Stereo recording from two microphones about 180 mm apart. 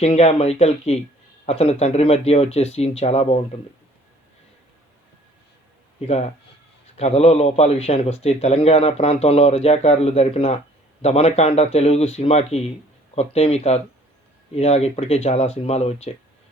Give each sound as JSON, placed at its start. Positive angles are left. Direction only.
{"t": 0.0, "sound": "a man's voice", "side_deg": 35}
{"t": 6.1, "sound": "a man's voice", "side_deg": 35}